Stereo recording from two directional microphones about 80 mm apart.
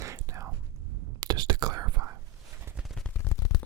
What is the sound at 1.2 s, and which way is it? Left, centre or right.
Whispering, right.